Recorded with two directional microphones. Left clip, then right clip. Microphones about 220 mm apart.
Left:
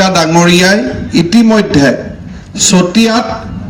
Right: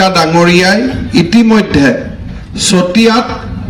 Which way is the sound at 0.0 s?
55° left (ahead or behind).